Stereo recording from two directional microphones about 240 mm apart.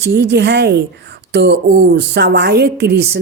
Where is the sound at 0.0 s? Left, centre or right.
Right.